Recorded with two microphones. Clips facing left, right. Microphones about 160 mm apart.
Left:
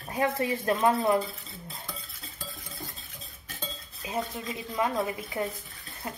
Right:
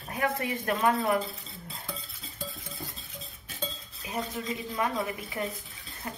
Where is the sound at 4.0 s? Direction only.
20° left (ahead or behind).